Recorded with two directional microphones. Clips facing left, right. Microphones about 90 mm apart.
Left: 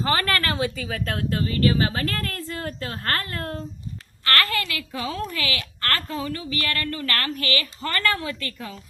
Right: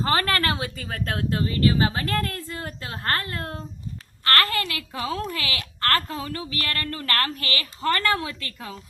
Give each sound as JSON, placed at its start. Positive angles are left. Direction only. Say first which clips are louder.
{"t": 0.0, "sound": "a woman's voice", "louder": "even", "side_deg": -30}
{"t": 4.2, "sound": "a woman's voice", "louder": "right 1 dB", "side_deg": -35}